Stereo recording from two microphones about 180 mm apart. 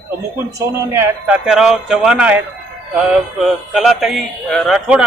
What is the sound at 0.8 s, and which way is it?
Speech, 15° right (ahead or behind).